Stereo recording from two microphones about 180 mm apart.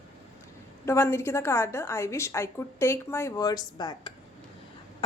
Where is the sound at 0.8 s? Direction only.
15° left (ahead or behind).